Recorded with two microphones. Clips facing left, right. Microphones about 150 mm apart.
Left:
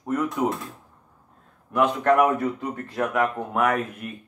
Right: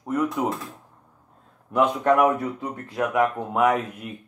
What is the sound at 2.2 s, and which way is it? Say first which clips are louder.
Speech: even; 10° right (ahead or behind).